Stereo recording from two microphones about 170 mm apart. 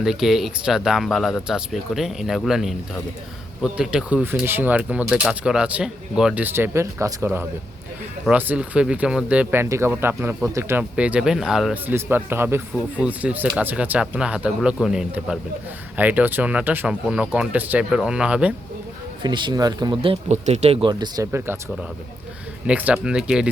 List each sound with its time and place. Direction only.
0.0 s speech: centre (ahead or behind)
19.2 s speech: 25° right (ahead or behind)
21.3 s speech: 15° right (ahead or behind)
22.6 s speech: 5° right (ahead or behind)